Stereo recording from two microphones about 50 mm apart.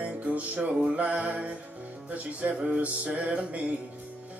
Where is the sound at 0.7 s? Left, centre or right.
Centre.